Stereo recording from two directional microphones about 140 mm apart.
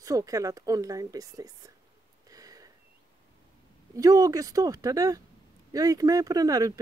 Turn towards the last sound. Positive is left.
turn(degrees=-25)  # may be behind; listen again after turning